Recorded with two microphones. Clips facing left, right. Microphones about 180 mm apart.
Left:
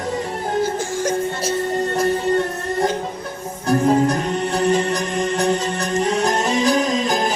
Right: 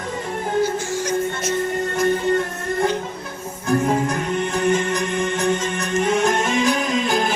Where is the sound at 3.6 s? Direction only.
35° left (ahead or behind).